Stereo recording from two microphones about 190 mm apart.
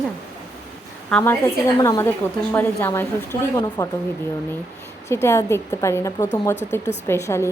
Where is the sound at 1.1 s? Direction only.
5° left (ahead or behind).